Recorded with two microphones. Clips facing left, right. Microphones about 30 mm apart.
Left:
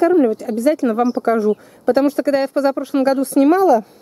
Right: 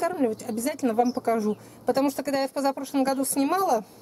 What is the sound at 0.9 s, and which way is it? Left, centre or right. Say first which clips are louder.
Speech: left 7 dB; left.